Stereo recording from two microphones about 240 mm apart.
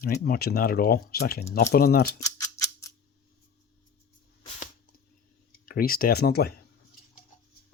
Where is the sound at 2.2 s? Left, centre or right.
Centre.